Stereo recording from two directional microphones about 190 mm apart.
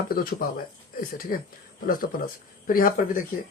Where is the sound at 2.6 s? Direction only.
45° left (ahead or behind).